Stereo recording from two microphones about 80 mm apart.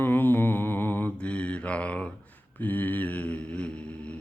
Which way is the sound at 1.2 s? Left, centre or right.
Centre.